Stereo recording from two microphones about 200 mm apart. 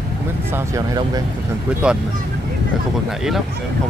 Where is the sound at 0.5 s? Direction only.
15° right (ahead or behind).